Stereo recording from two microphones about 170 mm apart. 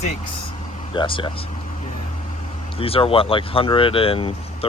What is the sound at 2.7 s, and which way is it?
Speech, 35° left (ahead or behind).